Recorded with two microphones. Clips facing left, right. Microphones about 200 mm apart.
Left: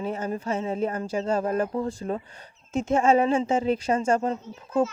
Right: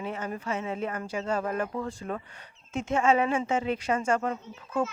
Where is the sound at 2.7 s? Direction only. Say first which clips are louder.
Left 4 dB; 40° left (ahead or behind).